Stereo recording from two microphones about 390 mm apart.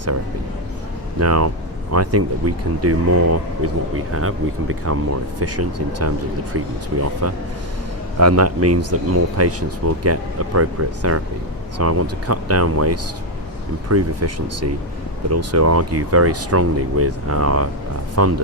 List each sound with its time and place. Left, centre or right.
1.2 s speech: right
7.2 s speech: right